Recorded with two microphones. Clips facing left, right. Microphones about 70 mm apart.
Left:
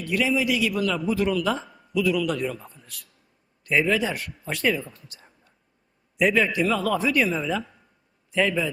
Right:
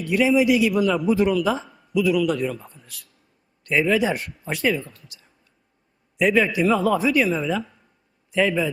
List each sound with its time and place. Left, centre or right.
0.0 s a man's voice: centre
1.3 s a man's voice: centre
4.1 s a man's voice: right
4.9 s a sound: left
6.1 s a man's voice: centre
6.9 s a man's voice: centre